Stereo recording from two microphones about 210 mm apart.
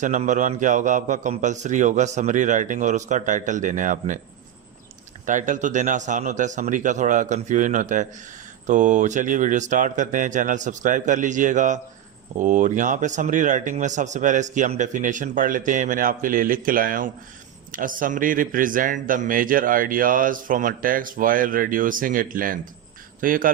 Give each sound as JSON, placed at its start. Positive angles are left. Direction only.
{"t": 0.0, "sound": "speech", "side_deg": -35}
{"t": 5.2, "sound": "speech", "side_deg": -35}